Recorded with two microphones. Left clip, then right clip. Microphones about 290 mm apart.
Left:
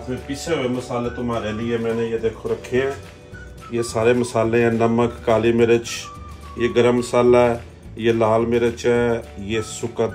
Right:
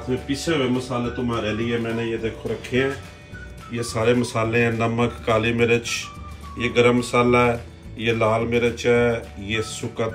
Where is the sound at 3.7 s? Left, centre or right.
Left.